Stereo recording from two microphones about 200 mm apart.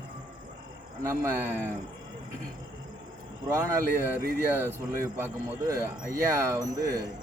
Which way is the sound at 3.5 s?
15° right (ahead or behind).